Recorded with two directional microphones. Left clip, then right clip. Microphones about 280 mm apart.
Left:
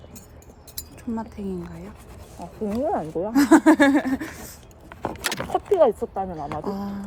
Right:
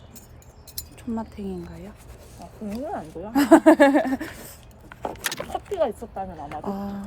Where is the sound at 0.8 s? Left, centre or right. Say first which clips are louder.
Right 1 dB; left.